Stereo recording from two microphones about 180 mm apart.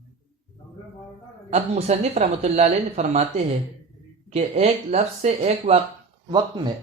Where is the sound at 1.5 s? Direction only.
35° right (ahead or behind).